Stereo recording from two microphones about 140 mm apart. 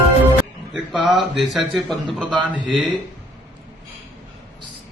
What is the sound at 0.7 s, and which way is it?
A man's voice, centre (ahead or behind).